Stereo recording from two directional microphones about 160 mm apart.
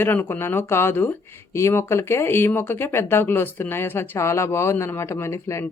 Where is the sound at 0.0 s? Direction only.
10° left (ahead or behind).